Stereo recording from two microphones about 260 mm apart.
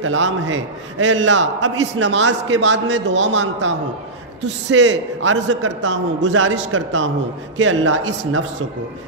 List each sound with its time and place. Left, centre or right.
0.0 s a man's voice: right
4.7 s a man's voice: right